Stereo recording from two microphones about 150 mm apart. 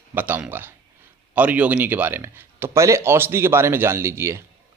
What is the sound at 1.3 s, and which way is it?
Speech, 10° right (ahead or behind).